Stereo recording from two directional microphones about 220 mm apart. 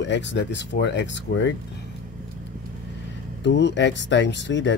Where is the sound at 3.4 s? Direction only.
50° left (ahead or behind).